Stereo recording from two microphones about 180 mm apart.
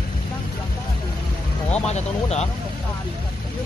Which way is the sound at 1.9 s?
35° left (ahead or behind).